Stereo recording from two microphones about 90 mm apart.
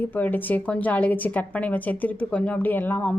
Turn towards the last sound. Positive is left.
turn(degrees=20)  # may be behind; listen again after turning